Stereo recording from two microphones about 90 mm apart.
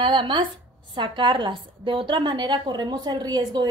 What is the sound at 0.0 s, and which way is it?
A woman's voice, 60° right (ahead or behind).